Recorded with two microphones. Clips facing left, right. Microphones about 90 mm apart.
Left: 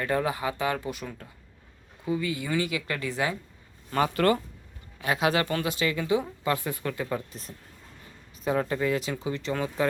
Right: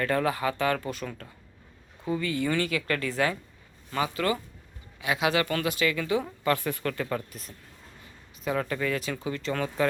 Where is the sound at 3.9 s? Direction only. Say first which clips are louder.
Left 4 dB; 45° left (ahead or behind).